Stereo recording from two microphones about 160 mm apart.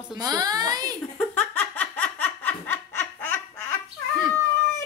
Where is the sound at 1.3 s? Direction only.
10° left (ahead or behind).